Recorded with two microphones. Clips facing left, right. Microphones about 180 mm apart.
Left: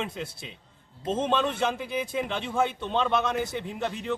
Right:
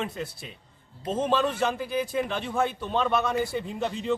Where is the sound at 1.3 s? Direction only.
5° right (ahead or behind).